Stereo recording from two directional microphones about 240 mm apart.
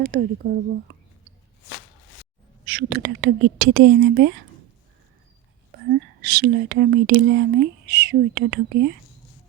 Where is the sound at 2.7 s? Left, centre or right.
Right.